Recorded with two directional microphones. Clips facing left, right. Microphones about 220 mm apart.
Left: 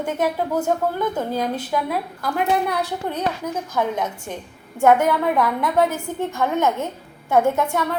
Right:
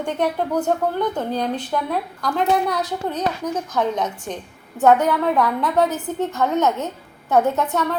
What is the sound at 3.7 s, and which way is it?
A woman's voice, 10° left (ahead or behind).